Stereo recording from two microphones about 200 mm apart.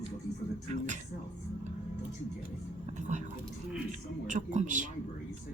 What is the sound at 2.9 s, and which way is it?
Speech, 35° right (ahead or behind).